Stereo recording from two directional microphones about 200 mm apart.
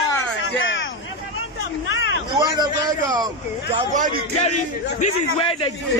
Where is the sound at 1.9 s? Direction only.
70° left (ahead or behind).